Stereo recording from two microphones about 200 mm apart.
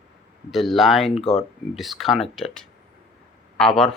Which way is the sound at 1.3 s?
30° left (ahead or behind).